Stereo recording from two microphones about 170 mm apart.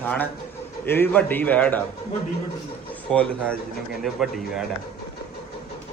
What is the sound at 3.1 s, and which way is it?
Speech, 5° left (ahead or behind).